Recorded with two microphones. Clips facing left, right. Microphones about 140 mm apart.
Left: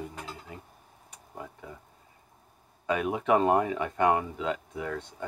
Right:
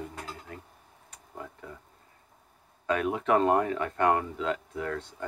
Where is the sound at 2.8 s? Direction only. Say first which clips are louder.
Even; 10° left (ahead or behind).